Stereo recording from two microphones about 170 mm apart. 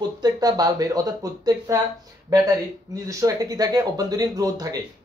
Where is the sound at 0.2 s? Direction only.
20° right (ahead or behind).